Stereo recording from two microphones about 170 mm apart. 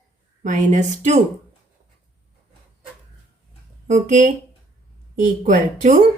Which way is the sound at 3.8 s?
45° right (ahead or behind).